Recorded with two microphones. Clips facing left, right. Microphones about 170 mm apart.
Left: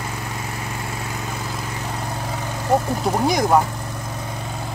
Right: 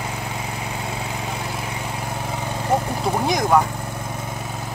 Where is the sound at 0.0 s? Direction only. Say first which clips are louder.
Right 1 dB; 15° right (ahead or behind).